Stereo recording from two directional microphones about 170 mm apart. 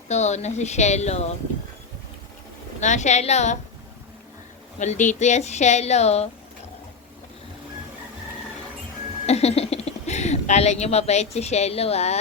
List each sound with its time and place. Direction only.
0.1 s a woman's voice: 40° left (ahead or behind)
2.8 s a woman's voice: 45° left (ahead or behind)
4.8 s a woman's voice: 45° left (ahead or behind)
9.2 s speech: 40° left (ahead or behind)